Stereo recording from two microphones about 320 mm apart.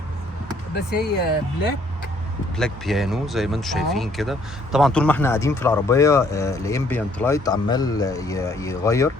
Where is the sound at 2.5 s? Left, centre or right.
Centre.